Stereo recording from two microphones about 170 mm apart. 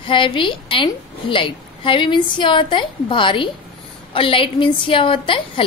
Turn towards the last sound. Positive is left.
turn(degrees=30)  # may be behind; listen again after turning